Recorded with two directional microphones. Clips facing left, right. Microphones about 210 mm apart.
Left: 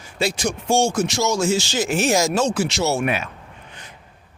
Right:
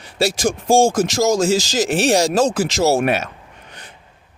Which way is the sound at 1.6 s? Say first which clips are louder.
Right 4 dB; 90° right.